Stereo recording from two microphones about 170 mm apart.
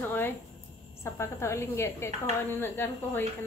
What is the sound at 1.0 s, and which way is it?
A woman's voice, 15° left (ahead or behind).